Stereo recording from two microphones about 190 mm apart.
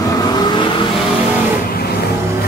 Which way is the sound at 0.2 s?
20° left (ahead or behind).